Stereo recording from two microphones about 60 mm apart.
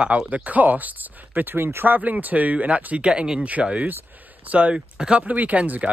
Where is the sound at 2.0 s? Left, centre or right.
Right; by 5.2 s centre.